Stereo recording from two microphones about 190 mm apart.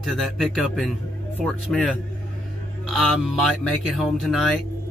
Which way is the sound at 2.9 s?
Centre (ahead or behind).